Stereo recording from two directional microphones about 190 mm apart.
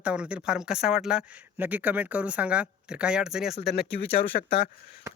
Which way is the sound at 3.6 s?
55° left (ahead or behind).